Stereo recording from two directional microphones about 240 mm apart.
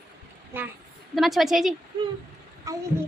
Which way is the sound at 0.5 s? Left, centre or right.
Centre.